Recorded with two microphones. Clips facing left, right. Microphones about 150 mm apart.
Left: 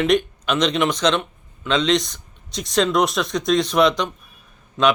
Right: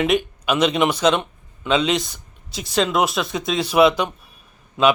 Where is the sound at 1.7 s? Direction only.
5° right (ahead or behind).